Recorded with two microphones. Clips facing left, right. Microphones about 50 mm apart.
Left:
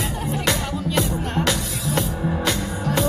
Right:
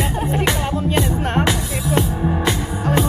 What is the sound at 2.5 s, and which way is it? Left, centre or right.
Music, right.